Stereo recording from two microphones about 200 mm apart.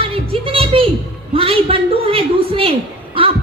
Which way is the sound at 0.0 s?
30° right (ahead or behind).